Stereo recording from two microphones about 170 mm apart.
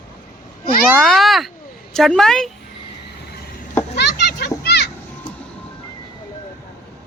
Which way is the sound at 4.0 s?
80° left.